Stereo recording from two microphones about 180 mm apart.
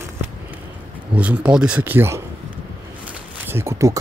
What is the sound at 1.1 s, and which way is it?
Speech, 10° right (ahead or behind).